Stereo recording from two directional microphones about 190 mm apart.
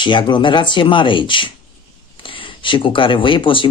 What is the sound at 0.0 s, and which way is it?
Speech, 25° left (ahead or behind).